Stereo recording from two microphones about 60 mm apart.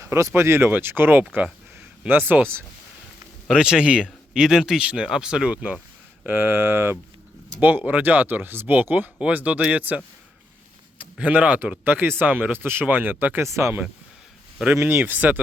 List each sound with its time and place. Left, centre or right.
0.0 s speech: right
3.5 s speech: centre
6.2 s speech: right
11.2 s speech: right
12.5 s speech: right
13.4 s speech: right
14.8 s speech: right